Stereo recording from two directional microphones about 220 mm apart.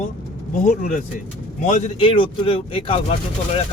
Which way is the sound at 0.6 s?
40° left (ahead or behind).